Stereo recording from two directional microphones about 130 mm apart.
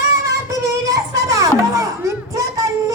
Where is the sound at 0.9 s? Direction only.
25° right (ahead or behind).